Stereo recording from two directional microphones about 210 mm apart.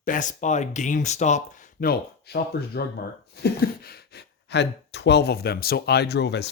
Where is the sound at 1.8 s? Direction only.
45° left (ahead or behind).